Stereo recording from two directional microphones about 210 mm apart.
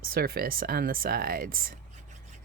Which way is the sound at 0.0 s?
45° right (ahead or behind).